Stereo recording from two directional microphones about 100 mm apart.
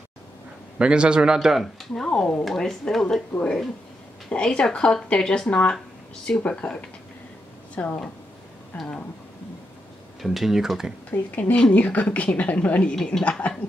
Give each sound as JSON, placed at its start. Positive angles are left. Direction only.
{"t": 0.7, "sound": "speech", "side_deg": -10}
{"t": 2.0, "sound": "a woman's voice", "side_deg": 10}
{"t": 10.2, "sound": "speech", "side_deg": 0}
{"t": 11.1, "sound": "a woman's voice", "side_deg": 15}